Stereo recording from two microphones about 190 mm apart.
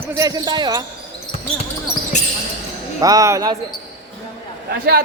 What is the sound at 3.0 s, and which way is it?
Speech, 20° right (ahead or behind).